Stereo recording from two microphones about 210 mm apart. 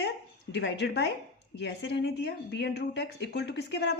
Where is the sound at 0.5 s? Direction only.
55° left (ahead or behind).